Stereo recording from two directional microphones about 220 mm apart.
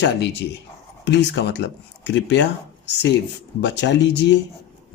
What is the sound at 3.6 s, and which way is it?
Speech, 55° left (ahead or behind).